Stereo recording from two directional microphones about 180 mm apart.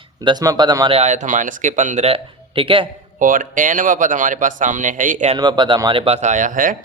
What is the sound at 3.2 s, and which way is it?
Speech, 45° right (ahead or behind).